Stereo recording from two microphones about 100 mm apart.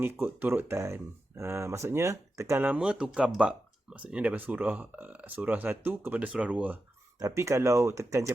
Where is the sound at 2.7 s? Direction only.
10° right (ahead or behind).